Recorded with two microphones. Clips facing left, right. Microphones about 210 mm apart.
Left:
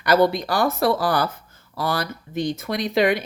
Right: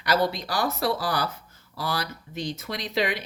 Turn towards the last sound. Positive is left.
turn(degrees=55)  # may be behind; listen again after turning